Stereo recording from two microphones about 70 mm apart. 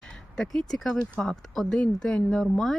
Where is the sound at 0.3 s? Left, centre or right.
Centre.